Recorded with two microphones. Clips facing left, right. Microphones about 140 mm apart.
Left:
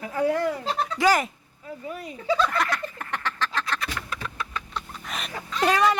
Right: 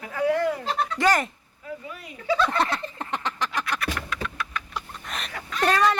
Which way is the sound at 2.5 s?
25° right (ahead or behind).